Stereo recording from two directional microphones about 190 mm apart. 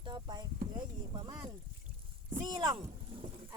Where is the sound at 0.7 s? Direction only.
25° right (ahead or behind).